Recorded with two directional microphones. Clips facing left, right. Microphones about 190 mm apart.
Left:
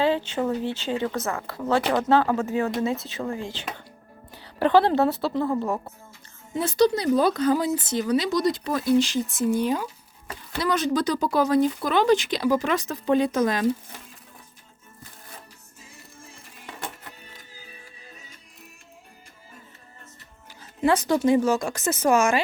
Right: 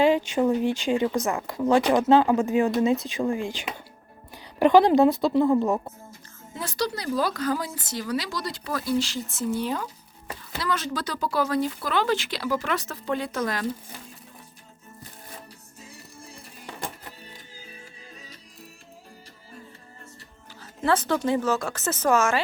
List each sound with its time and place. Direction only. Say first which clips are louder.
0.0 s speech: right 3 dB; 10° right (ahead or behind)
6.5 s speech: left 9 dB; 20° left (ahead or behind)
15.9 s music: right 2 dB; 35° right (ahead or behind)
20.5 s speech: left 2 dB; 15° left (ahead or behind)